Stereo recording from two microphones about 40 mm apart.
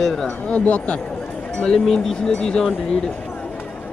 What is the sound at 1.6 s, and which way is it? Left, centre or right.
Speech, centre.